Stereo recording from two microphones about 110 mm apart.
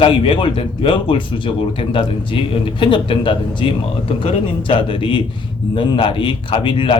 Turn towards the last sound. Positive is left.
turn(degrees=50)  # may be behind; listen again after turning